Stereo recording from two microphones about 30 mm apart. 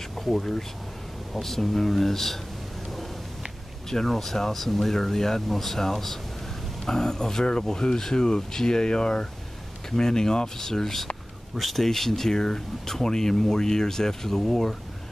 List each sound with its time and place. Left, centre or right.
0.1 s speech: centre
3.9 s speech: centre
6.9 s speech: centre
11.5 s speech: centre